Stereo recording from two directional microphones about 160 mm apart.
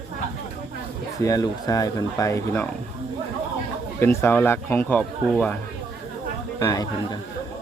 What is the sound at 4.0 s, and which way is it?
Speech, 15° left (ahead or behind).